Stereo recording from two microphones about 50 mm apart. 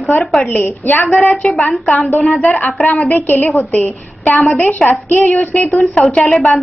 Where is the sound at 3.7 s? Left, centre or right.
Left.